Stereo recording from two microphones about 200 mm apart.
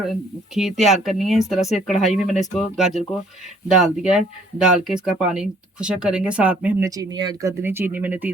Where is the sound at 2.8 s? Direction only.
Centre (ahead or behind).